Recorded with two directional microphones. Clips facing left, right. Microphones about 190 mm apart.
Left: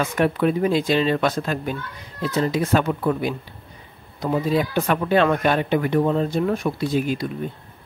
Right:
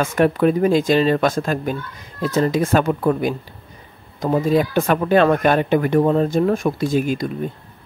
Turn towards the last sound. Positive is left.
turn(degrees=-45)  # may be behind; listen again after turning